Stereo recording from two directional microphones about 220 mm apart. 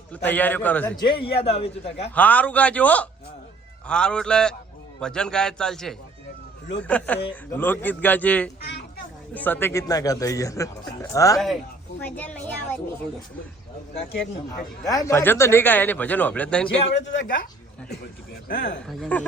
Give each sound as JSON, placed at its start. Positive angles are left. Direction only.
{"t": 0.1, "sound": "a man's voice", "side_deg": 10}
{"t": 0.9, "sound": "a man's voice", "side_deg": 20}
{"t": 2.1, "sound": "a man's voice", "side_deg": 5}
{"t": 13.9, "sound": "speech", "side_deg": 50}
{"t": 14.8, "sound": "a man's voice", "side_deg": 15}
{"t": 16.6, "sound": "a man's voice", "side_deg": 25}
{"t": 16.9, "sound": "speech", "side_deg": 45}
{"t": 18.9, "sound": "a man's voice", "side_deg": 5}